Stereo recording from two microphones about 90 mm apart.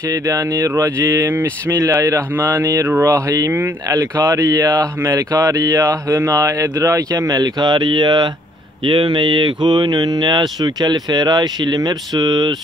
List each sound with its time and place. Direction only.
0.1 s speech: 40° right (ahead or behind)
8.8 s speech: 65° right (ahead or behind); by 12.5 s 45° right (ahead or behind)